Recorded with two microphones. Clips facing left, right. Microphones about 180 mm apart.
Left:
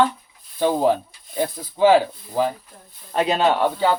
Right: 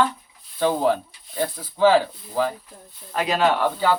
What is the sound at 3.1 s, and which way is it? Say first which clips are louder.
Speech: left 2 dB; 30° left (ahead or behind).